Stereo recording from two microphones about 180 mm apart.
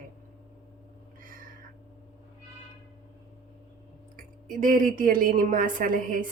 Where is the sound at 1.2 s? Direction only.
50° right (ahead or behind).